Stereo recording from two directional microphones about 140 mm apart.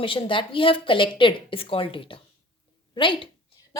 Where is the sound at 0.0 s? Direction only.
40° left (ahead or behind).